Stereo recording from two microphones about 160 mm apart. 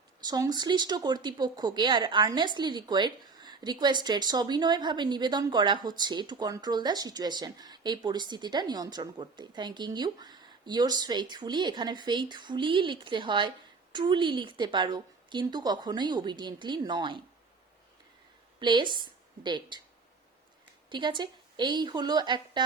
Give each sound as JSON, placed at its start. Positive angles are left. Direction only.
{"t": 0.2, "sound": "speech", "side_deg": -25}
{"t": 18.6, "sound": "a woman's voice", "side_deg": -30}
{"t": 20.9, "sound": "speech", "side_deg": -30}